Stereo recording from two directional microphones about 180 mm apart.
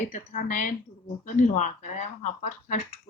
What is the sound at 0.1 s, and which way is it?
Speech, 45° left (ahead or behind).